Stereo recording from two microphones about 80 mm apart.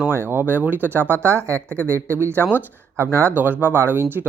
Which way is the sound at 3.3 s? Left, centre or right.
Right.